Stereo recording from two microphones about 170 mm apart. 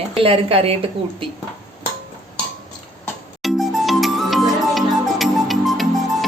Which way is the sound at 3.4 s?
Centre (ahead or behind).